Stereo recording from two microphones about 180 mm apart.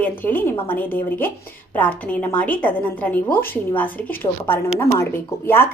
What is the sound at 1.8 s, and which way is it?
A woman's voice, 10° left (ahead or behind).